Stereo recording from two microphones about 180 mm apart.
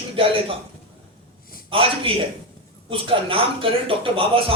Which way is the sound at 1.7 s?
30° right (ahead or behind).